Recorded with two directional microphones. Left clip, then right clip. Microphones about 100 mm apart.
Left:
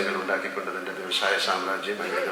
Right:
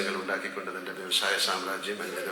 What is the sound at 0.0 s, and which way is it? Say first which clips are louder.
A man's voice: left 4 dB; 15° left (ahead or behind).